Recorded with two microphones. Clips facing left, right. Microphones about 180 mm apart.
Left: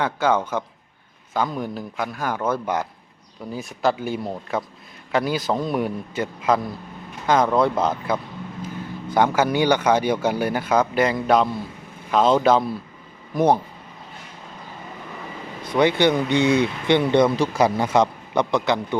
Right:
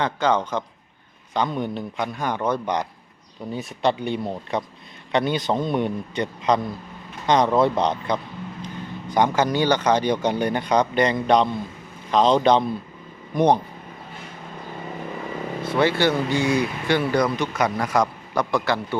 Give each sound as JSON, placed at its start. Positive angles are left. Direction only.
{"t": 0.0, "sound": "speech", "side_deg": 5}
{"t": 15.7, "sound": "speech", "side_deg": 15}